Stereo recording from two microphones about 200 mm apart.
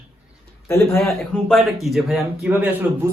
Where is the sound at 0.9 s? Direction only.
Centre (ahead or behind).